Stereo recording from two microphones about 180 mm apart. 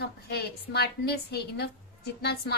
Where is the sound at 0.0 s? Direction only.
65° left (ahead or behind).